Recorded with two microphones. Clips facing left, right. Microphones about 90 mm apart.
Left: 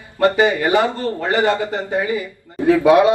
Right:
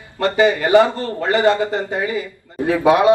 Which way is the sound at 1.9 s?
25° left (ahead or behind).